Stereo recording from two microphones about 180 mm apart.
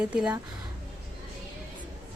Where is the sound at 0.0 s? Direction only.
5° right (ahead or behind).